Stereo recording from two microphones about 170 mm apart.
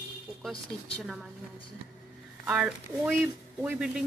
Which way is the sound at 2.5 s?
5° right (ahead or behind).